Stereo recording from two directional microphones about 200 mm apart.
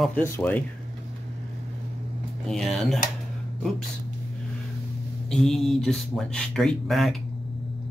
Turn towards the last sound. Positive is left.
turn(degrees=0)  # may be behind; listen again after turning